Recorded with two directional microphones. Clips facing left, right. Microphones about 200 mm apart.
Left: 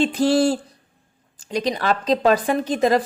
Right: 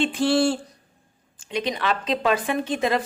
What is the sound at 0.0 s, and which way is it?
A woman's voice, 40° left (ahead or behind).